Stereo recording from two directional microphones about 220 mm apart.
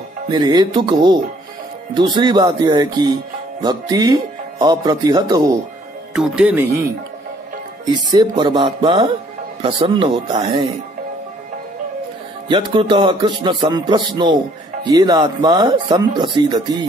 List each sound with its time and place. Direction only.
0.3 s speech: 20° right (ahead or behind)
6.1 s speech: 5° right (ahead or behind)
8.1 s speech: 20° right (ahead or behind)
12.4 s speech: 20° right (ahead or behind)